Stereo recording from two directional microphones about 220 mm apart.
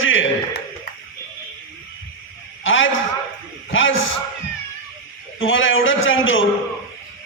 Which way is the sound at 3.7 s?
60° left (ahead or behind).